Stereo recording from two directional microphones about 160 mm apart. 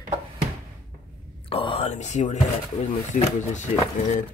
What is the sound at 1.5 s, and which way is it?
Speech, 35° left (ahead or behind).